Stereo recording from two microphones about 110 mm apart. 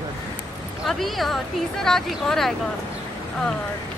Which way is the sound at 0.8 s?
Centre (ahead or behind).